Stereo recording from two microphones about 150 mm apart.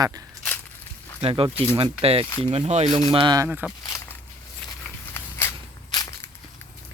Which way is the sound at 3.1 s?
30° right (ahead or behind).